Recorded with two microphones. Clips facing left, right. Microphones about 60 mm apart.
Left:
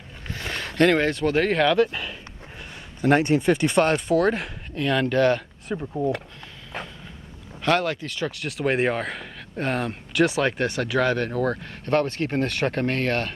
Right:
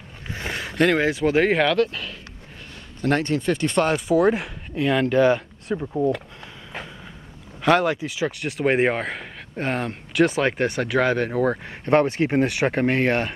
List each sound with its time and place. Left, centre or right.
0.5 s speech: centre
1.8 s speech: centre
3.8 s speech: centre
7.6 s speech: centre